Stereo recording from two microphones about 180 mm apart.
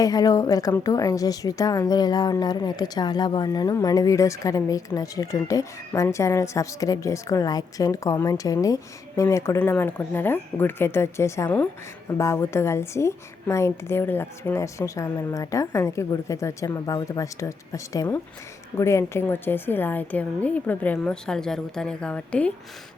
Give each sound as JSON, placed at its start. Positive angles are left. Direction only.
{"t": 0.0, "sound": "a woman's voice", "side_deg": 20}